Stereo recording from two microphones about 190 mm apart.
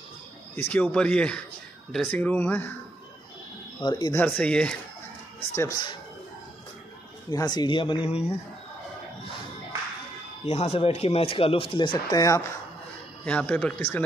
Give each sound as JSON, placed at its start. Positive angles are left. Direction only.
{"t": 0.6, "sound": "speech", "side_deg": 10}
{"t": 3.8, "sound": "speech", "side_deg": 20}
{"t": 4.2, "sound": "speech", "side_deg": 5}
{"t": 7.2, "sound": "speech", "side_deg": 20}
{"t": 10.4, "sound": "speech", "side_deg": 35}
{"t": 13.2, "sound": "speech", "side_deg": 5}